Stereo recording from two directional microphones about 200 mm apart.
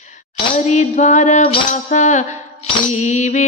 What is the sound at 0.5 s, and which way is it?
Music, 35° left (ahead or behind).